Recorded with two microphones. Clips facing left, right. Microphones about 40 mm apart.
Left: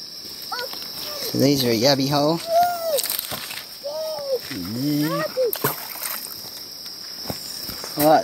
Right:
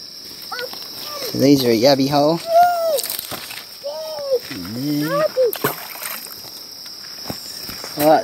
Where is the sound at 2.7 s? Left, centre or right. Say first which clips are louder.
Right 6 dB; right.